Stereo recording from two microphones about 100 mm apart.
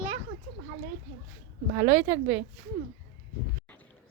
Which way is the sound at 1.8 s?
30° right (ahead or behind).